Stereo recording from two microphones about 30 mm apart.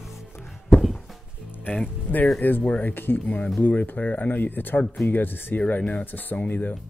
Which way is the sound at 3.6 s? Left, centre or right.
Left.